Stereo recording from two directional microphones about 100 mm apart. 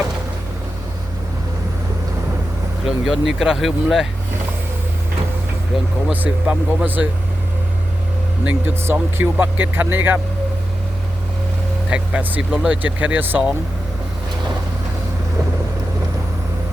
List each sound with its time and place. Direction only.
2.8 s speech: 5° right (ahead or behind)
5.7 s speech: centre (ahead or behind)
6.1 s speech: 15° right (ahead or behind)
8.4 s speech: 20° right (ahead or behind)
11.9 s speech: 10° right (ahead or behind)